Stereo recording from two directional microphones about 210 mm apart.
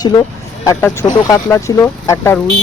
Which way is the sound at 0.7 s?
10° left (ahead or behind).